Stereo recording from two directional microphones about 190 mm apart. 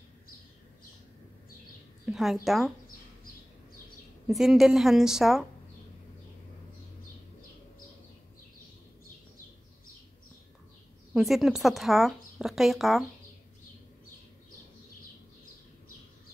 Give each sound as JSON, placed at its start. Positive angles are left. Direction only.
{"t": 2.0, "sound": "speech", "side_deg": 0}
{"t": 4.3, "sound": "speech", "side_deg": 0}
{"t": 11.1, "sound": "speech", "side_deg": 0}